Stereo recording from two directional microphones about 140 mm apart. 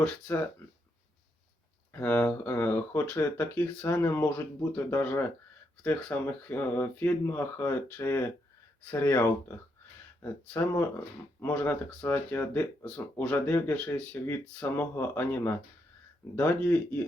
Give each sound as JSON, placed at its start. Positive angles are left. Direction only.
{"t": 1.9, "sound": "speech", "side_deg": 15}